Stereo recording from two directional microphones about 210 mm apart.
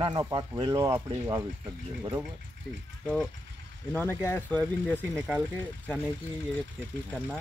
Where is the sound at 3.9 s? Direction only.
10° left (ahead or behind).